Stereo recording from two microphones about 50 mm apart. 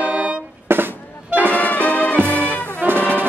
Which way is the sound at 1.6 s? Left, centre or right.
Left.